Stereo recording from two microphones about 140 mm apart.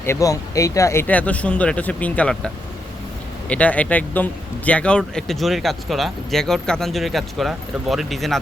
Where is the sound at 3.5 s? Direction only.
10° left (ahead or behind).